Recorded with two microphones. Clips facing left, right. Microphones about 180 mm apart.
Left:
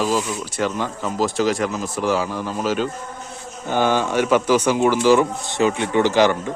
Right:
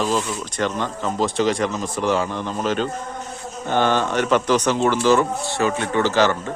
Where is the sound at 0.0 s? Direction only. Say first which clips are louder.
Left 1 dB; 5° left (ahead or behind).